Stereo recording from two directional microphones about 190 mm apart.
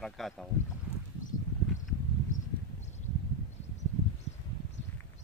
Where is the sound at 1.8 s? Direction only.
40° left (ahead or behind).